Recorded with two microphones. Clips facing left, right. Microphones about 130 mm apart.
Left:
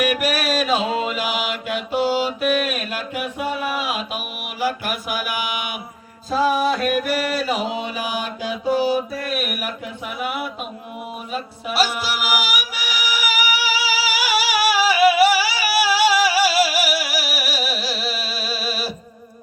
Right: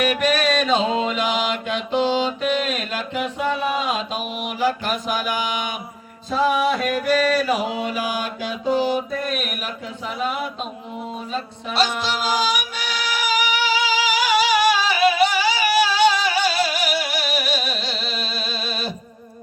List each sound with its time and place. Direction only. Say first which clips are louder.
0.0 s mantra: right 1 dB; 5° left (ahead or behind)
11.3 s music: left 1 dB; 10° left (ahead or behind)